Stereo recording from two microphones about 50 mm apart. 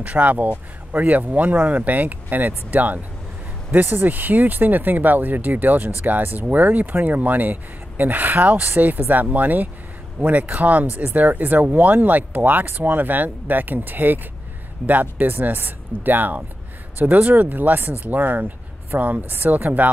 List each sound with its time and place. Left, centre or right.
0.0 s speech: right